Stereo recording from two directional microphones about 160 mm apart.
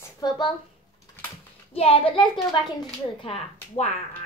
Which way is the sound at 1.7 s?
35° left (ahead or behind).